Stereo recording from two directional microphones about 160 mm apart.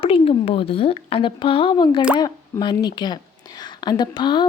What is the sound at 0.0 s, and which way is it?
A woman's voice, 35° left (ahead or behind).